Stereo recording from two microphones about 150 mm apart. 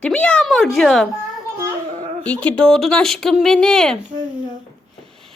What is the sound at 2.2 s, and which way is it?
Speech, 10° left (ahead or behind).